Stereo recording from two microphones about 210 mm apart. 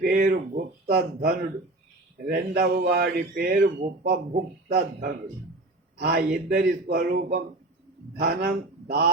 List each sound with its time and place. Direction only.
0.0 s speech: 45° right (ahead or behind)
2.3 s speech: 45° right (ahead or behind)
6.0 s speech: 45° right (ahead or behind)